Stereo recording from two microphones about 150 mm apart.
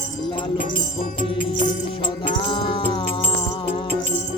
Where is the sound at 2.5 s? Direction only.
35° left (ahead or behind).